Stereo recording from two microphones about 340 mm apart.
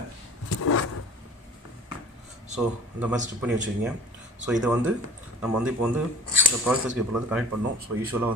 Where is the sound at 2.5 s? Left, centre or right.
Centre.